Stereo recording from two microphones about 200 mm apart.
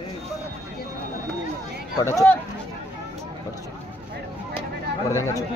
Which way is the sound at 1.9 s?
15° left (ahead or behind).